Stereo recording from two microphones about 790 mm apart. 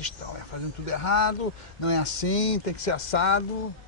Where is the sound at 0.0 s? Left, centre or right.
Left.